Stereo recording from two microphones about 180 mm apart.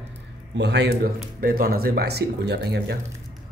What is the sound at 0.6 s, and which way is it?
Speech, 70° right (ahead or behind).